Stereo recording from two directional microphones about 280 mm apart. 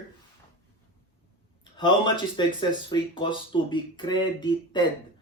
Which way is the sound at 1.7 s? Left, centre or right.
Centre.